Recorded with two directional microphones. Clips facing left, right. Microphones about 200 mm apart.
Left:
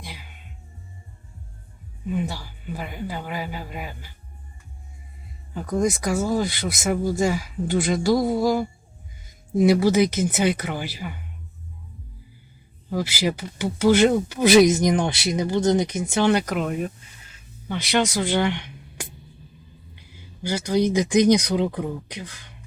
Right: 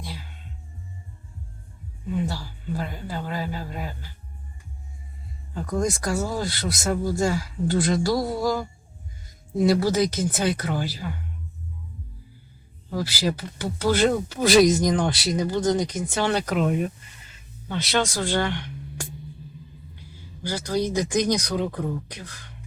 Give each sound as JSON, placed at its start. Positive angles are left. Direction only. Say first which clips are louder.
{"t": 0.0, "sound": "music", "louder": "right 3 dB", "side_deg": 15}
{"t": 2.0, "sound": "speech", "louder": "even", "side_deg": 15}
{"t": 5.7, "sound": "speech", "louder": "left 3 dB", "side_deg": 20}
{"t": 12.9, "sound": "speech", "louder": "left 2 dB", "side_deg": 15}
{"t": 16.5, "sound": "speech", "louder": "right 2 dB", "side_deg": 0}
{"t": 17.7, "sound": "speech", "louder": "left 2 dB", "side_deg": 15}
{"t": 20.5, "sound": "speech", "louder": "left 4 dB", "side_deg": 20}